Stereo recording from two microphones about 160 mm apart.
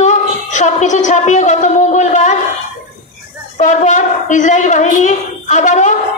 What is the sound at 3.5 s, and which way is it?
A man's voice, 50° left (ahead or behind).